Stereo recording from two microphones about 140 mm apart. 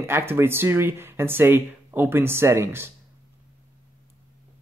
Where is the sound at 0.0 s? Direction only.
15° right (ahead or behind).